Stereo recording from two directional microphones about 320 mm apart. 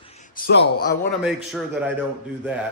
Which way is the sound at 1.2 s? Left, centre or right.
Centre.